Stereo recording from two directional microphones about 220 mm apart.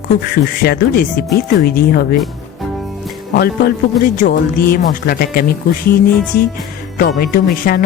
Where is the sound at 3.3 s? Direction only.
40° left (ahead or behind).